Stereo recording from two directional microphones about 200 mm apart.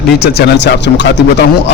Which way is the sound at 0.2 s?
55° left (ahead or behind).